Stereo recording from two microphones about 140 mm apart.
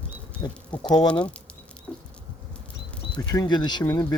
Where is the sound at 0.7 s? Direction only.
10° left (ahead or behind).